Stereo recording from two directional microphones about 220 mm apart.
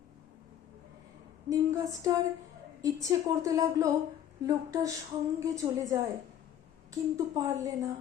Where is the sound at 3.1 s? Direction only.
15° right (ahead or behind).